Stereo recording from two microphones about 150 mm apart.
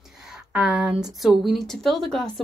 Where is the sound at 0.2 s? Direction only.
5° right (ahead or behind).